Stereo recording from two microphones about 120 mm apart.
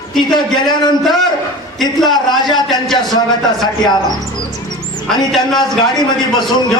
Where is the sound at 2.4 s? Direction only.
35° left (ahead or behind).